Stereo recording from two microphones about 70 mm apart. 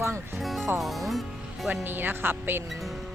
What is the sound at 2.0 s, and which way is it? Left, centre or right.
Speech, right.